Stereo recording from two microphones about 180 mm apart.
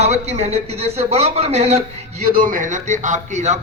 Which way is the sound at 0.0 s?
35° right (ahead or behind).